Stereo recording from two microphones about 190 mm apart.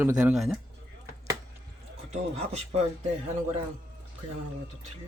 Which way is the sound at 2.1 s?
35° right (ahead or behind).